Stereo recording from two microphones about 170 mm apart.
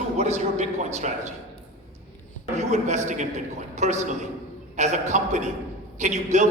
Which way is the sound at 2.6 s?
40° right (ahead or behind).